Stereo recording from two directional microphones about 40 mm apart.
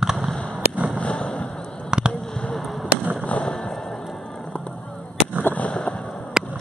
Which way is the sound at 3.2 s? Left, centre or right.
Left.